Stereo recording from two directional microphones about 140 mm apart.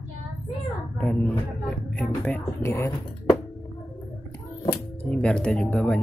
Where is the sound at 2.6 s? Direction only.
20° left (ahead or behind).